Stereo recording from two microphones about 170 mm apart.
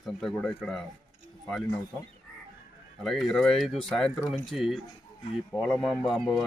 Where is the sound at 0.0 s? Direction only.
Centre (ahead or behind).